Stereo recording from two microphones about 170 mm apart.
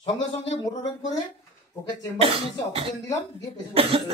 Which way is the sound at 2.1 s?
35° right (ahead or behind).